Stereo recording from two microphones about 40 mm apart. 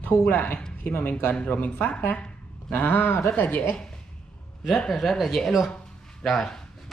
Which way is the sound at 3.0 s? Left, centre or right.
Left.